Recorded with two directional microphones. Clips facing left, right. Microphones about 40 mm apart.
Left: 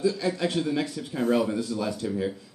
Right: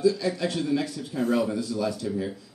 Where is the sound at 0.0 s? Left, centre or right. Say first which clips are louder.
Right 2 dB; left.